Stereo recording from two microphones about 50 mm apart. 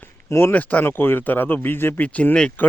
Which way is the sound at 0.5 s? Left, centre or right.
Left.